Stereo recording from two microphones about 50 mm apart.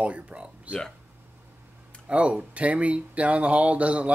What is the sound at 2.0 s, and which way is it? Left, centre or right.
Speech, right.